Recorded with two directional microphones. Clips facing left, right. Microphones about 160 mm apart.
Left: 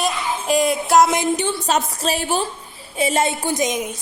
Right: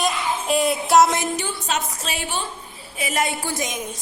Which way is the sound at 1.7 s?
40° left (ahead or behind).